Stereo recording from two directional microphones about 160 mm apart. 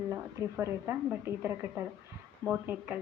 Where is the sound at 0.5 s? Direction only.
15° right (ahead or behind).